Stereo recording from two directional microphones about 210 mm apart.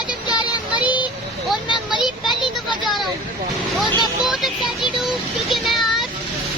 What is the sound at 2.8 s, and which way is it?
Vehicle, centre (ahead or behind).